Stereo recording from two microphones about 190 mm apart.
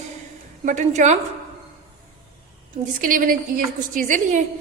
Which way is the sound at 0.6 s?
40° right (ahead or behind).